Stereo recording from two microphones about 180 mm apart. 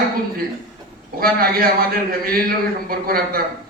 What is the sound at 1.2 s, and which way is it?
A man's voice, 55° right (ahead or behind).